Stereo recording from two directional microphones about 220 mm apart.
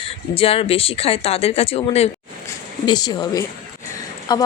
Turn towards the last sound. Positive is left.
turn(degrees=20)  # may be behind; listen again after turning